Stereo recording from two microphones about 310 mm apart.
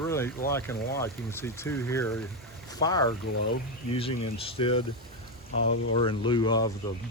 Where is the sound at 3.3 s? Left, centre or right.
Left.